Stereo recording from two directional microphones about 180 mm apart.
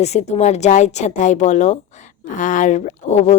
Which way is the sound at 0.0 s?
40° left (ahead or behind).